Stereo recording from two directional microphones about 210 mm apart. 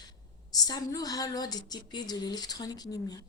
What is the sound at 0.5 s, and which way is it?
Speech, 15° left (ahead or behind).